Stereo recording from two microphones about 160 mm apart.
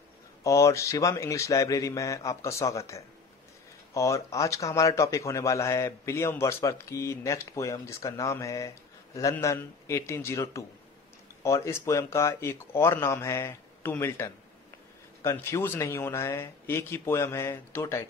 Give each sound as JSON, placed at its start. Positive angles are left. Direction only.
{"t": 0.4, "sound": "speech", "side_deg": 20}